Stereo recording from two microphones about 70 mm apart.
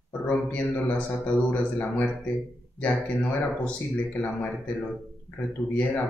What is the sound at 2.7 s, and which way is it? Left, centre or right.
A man's voice, centre.